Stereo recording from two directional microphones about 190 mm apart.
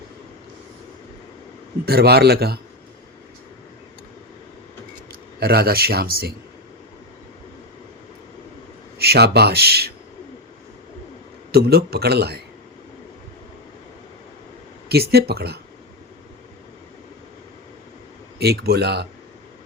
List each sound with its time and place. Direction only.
1.8 s speech: 55° right (ahead or behind)
5.4 s speech: 55° right (ahead or behind)
9.0 s speech: 60° right (ahead or behind)
11.5 s speech: 55° right (ahead or behind)
14.8 s speech: 55° right (ahead or behind)
18.3 s speech: 55° right (ahead or behind)